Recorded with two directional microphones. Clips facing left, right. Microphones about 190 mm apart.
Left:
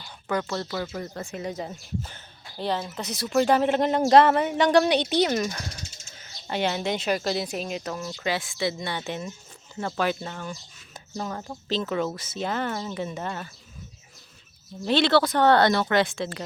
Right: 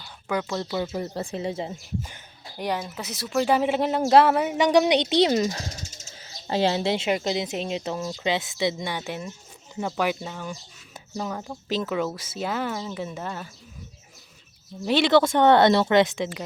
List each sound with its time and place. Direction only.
0.3 s speech: 10° right (ahead or behind); by 1.7 s 25° right (ahead or behind)
2.0 s speech: 10° right (ahead or behind)
14.8 s speech: 10° right (ahead or behind)